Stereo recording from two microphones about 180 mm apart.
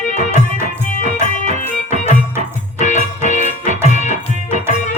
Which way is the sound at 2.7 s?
40° left (ahead or behind).